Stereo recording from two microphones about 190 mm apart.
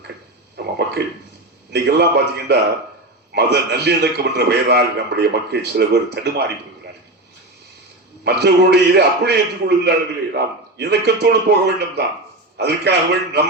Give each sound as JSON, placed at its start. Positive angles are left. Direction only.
{"t": 0.5, "sound": "a sound", "side_deg": -60}
{"t": 1.7, "sound": "a man's voice", "side_deg": -60}
{"t": 8.2, "sound": "a man's voice", "side_deg": -60}